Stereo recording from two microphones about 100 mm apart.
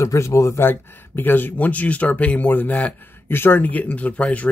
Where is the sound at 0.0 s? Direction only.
30° left (ahead or behind).